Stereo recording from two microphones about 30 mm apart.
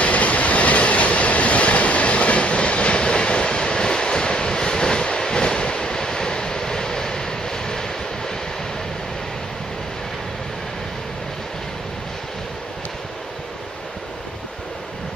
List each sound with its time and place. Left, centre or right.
0.0 s train: left